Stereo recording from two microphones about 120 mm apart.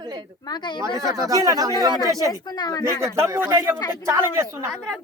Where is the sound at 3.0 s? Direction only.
20° right (ahead or behind).